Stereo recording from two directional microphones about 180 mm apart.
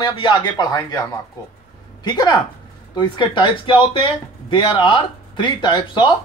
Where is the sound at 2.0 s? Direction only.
25° left (ahead or behind).